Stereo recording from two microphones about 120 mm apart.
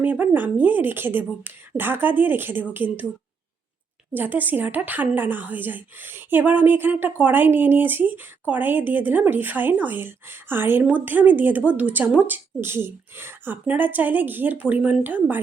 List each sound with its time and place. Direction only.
0.0 s a woman's voice: 15° right (ahead or behind)
4.1 s a woman's voice: 15° right (ahead or behind)